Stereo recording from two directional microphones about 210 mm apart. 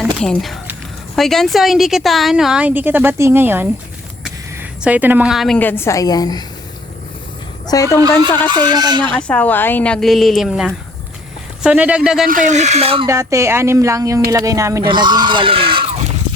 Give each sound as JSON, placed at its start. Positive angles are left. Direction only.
{"t": 0.0, "sound": "a woman's voice", "side_deg": 0}
{"t": 7.7, "sound": "a woman's voice", "side_deg": 15}
{"t": 8.4, "sound": "speech", "side_deg": -20}
{"t": 9.1, "sound": "a woman's voice", "side_deg": 5}
{"t": 12.3, "sound": "speech", "side_deg": -35}
{"t": 13.1, "sound": "speech", "side_deg": -15}